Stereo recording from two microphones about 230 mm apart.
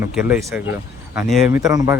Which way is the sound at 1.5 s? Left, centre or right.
Centre.